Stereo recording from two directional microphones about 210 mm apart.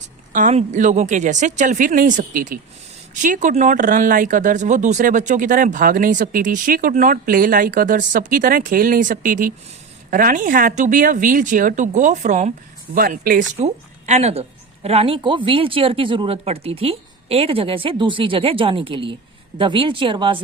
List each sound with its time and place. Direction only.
0.3 s speech: 35° right (ahead or behind)
14.1 s speech: 30° right (ahead or behind)